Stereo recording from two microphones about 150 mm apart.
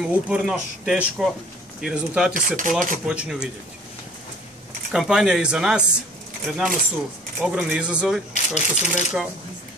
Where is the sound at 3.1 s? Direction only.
5° right (ahead or behind).